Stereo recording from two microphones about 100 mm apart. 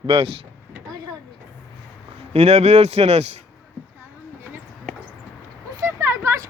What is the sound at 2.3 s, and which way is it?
Speech, 90° right.